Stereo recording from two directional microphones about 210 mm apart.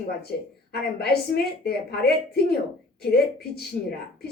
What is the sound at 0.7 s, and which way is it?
A woman's voice, 50° left (ahead or behind).